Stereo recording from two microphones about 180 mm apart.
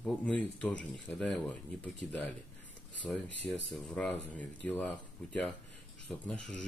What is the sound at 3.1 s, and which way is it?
Speech, centre (ahead or behind).